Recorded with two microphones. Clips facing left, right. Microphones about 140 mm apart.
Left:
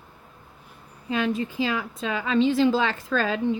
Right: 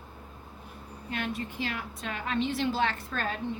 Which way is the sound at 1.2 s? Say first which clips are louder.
Left 8 dB; 90° left.